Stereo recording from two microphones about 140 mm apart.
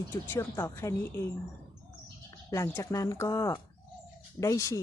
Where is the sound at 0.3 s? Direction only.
20° left (ahead or behind).